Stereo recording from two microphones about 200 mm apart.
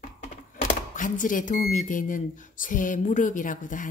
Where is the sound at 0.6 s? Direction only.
40° left (ahead or behind).